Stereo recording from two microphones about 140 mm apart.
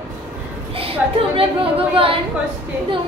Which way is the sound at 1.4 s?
40° right (ahead or behind).